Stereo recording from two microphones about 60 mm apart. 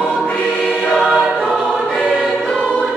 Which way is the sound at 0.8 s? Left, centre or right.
Left.